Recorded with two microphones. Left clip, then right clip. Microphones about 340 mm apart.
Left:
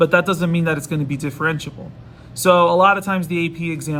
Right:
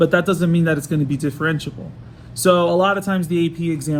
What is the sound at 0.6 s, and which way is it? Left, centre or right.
Speech, centre.